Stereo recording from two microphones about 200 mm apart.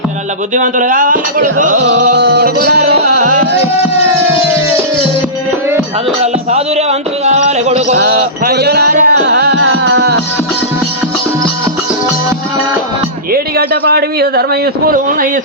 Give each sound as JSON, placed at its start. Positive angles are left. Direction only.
{"t": 0.5, "sound": "cutlery", "side_deg": -40}
{"t": 2.1, "sound": "music", "side_deg": -55}
{"t": 6.2, "sound": "music", "side_deg": -30}
{"t": 7.9, "sound": "music", "side_deg": -55}
{"t": 13.3, "sound": "a man's voice", "side_deg": -50}